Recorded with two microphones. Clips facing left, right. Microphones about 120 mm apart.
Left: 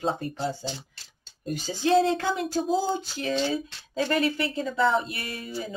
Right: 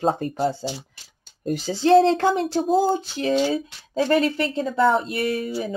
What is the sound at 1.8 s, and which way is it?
Speech, 35° right (ahead or behind).